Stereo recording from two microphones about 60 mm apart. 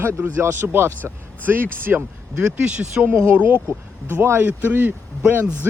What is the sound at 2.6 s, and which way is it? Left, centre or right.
Speech, centre.